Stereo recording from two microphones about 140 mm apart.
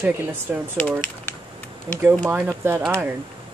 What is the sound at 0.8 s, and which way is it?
Speech, 10° left (ahead or behind).